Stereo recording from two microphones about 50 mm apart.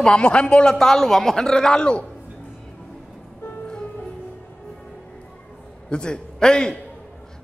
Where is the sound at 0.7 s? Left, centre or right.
Centre.